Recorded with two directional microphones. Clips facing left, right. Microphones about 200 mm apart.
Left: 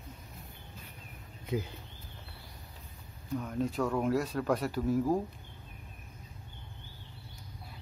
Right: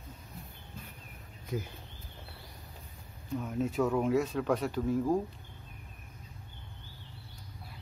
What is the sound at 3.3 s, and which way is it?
Speech, 5° right (ahead or behind).